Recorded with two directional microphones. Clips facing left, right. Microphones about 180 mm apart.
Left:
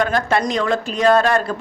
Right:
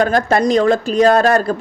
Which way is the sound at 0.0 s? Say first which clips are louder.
Right 4 dB; 35° right (ahead or behind).